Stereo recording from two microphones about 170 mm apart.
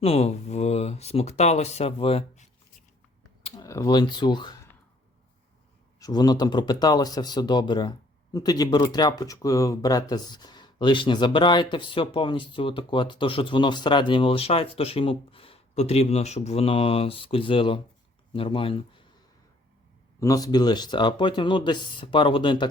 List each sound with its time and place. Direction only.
0.0 s speech: 35° left (ahead or behind)
3.6 s speech: 20° left (ahead or behind)
6.0 s speech: 25° left (ahead or behind)
20.1 s speech: 20° left (ahead or behind)